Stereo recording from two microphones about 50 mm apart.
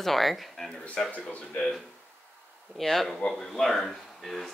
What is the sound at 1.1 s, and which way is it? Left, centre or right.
Speech, left.